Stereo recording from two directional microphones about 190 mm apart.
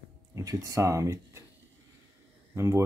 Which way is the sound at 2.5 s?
15° right (ahead or behind).